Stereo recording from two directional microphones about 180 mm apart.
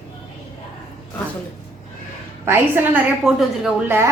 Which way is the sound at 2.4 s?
10° right (ahead or behind).